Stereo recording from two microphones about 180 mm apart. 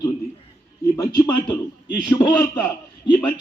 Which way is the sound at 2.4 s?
10° left (ahead or behind).